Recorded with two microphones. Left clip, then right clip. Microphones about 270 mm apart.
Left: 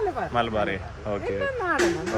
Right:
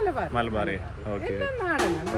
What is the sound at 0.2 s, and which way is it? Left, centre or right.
A man's voice, centre.